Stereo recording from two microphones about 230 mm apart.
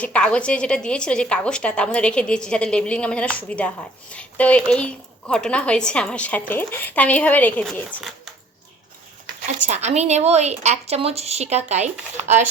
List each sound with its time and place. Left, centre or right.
0.0 s a woman's voice: centre
9.6 s a woman's voice: right